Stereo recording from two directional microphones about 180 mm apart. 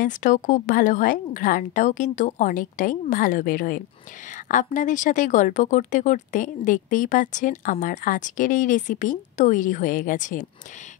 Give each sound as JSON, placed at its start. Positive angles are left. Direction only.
{"t": 0.0, "sound": "speech", "side_deg": 45}